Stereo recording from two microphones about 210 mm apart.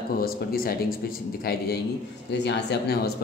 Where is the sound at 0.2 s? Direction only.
45° left (ahead or behind).